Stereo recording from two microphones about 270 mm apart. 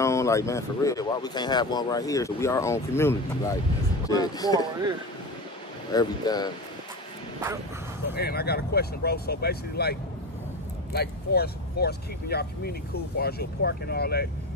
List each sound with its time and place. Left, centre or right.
0.0 s speech: centre
5.9 s speech: centre
8.1 s speech: left